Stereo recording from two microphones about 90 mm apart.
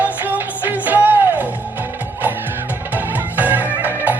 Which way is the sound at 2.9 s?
20° right (ahead or behind).